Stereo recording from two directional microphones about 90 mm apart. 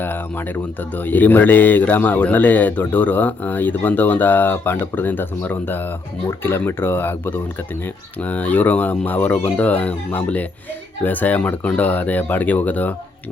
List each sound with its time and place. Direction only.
0.0 s speech: 20° left (ahead or behind)